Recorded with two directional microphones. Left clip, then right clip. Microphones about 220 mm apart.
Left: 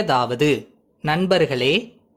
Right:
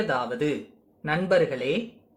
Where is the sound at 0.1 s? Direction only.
45° left (ahead or behind).